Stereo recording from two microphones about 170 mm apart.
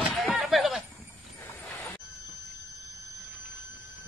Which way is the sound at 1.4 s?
10° left (ahead or behind).